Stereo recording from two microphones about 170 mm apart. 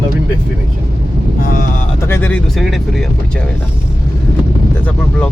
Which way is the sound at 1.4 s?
55° left (ahead or behind).